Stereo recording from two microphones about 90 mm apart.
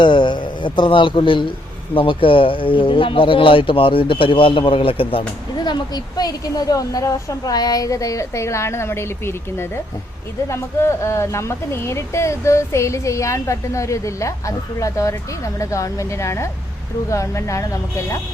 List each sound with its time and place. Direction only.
0.0 s a man's voice: 60° left (ahead or behind); by 5.2 s 75° left (ahead or behind)
5.5 s speech: 50° left (ahead or behind); by 18.2 s 35° left (ahead or behind)